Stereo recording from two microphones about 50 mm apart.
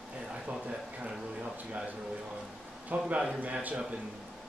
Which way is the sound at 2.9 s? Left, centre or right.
Right.